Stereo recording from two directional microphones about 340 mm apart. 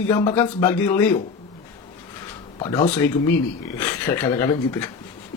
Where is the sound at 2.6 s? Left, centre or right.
Centre.